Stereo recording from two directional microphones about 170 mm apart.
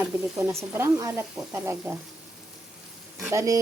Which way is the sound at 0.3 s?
15° right (ahead or behind).